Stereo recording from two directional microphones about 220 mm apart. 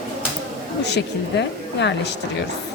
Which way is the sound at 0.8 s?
50° left (ahead or behind).